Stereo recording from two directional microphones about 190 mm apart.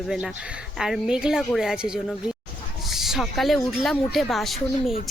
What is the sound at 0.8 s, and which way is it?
A woman's voice, 5° right (ahead or behind).